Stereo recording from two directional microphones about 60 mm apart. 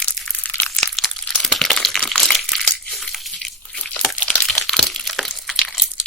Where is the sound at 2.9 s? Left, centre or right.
Centre.